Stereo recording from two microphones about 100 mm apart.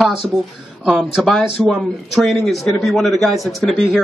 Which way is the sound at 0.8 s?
5° right (ahead or behind).